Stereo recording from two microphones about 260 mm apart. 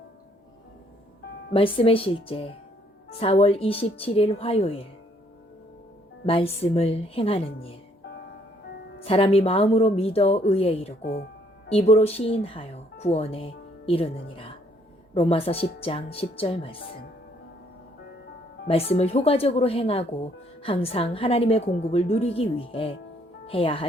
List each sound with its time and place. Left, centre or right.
1.5 s speech: left
6.2 s speech: left
9.0 s speech: left
11.0 s speech: left
11.7 s speech: left
18.7 s speech: left